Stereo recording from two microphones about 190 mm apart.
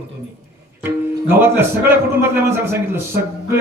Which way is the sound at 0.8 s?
10° right (ahead or behind).